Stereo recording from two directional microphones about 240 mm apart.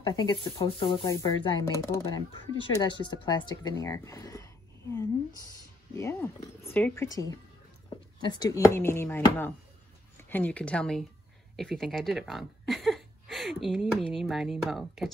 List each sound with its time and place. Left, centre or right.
0.0 s speech: centre